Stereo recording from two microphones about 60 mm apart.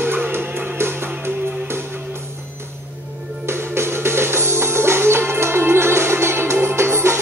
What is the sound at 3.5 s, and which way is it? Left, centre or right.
Music, right.